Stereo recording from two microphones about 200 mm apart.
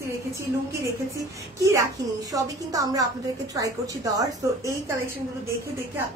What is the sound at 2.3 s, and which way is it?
Speech, 15° right (ahead or behind).